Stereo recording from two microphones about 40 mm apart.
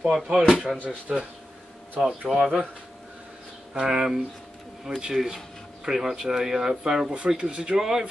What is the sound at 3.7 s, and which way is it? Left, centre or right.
Speech, centre.